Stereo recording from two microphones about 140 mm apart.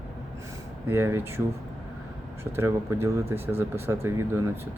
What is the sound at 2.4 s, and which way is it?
Speech, 20° right (ahead or behind).